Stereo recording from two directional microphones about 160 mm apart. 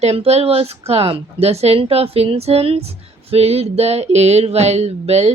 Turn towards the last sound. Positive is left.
turn(degrees=-40)  # may be behind; listen again after turning